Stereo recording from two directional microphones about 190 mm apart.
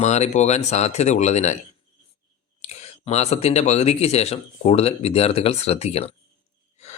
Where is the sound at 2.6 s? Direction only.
35° left (ahead or behind).